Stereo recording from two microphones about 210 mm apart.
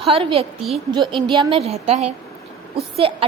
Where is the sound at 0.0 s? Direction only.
25° right (ahead or behind).